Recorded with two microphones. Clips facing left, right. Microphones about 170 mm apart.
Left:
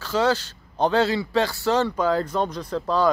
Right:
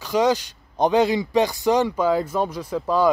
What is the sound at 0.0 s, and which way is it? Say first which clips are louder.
A man's voice: right 2 dB; 15° right (ahead or behind).